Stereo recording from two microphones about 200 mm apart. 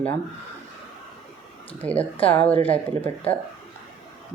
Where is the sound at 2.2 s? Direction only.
10° left (ahead or behind).